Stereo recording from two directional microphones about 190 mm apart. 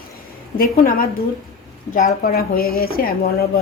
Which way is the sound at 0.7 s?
50° left (ahead or behind).